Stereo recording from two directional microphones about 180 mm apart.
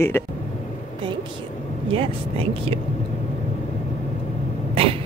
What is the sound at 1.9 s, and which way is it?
Speech, 30° right (ahead or behind).